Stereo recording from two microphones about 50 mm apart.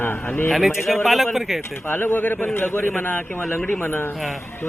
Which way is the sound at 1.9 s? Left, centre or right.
Left.